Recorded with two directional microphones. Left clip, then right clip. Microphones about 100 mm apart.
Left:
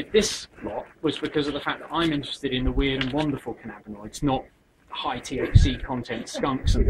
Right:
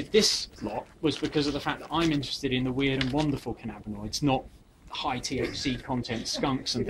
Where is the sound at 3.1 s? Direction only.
30° right (ahead or behind).